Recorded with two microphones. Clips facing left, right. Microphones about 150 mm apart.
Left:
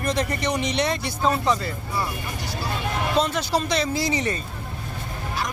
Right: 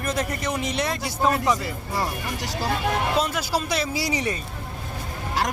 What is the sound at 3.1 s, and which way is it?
Speech, 10° right (ahead or behind).